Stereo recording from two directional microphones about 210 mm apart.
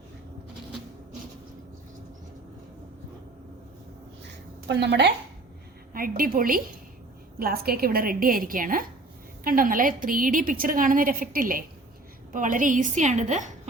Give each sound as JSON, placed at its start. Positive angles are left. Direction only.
{"t": 4.7, "sound": "a woman's voice", "side_deg": -55}
{"t": 5.9, "sound": "a woman's voice", "side_deg": -45}